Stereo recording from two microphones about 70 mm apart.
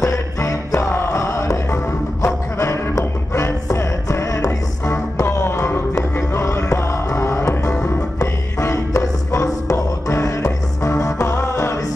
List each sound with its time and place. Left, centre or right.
0.0 s music: left
0.7 s music: left
5.2 s music: left
11.3 s music: left